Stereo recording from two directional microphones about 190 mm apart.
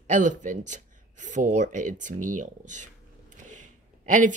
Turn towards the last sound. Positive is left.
turn(degrees=-40)  # may be behind; listen again after turning